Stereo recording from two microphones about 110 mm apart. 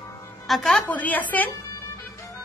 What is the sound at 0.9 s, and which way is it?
Speech, 15° left (ahead or behind).